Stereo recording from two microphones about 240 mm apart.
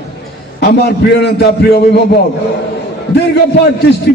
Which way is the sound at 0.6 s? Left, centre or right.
Left.